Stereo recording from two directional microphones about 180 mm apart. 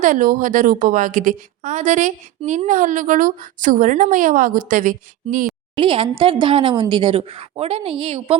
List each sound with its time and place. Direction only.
0.0 s a woman's voice: 50° right (ahead or behind)
5.8 s speech: 30° right (ahead or behind)